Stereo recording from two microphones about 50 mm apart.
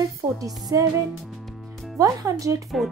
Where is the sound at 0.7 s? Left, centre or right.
Right.